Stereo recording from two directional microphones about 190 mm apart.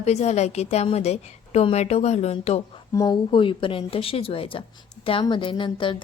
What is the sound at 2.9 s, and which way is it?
A woman's voice, 20° left (ahead or behind).